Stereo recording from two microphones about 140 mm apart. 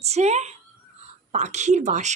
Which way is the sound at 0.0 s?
50° right (ahead or behind).